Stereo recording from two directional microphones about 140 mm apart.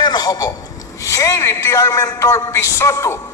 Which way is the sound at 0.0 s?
30° left (ahead or behind).